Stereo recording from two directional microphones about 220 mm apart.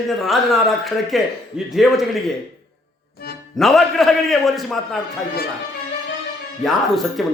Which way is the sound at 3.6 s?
Centre (ahead or behind).